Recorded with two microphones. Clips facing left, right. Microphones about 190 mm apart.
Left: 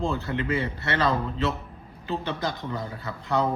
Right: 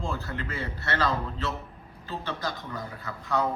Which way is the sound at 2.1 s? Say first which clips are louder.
Left 4 dB; 20° left (ahead or behind).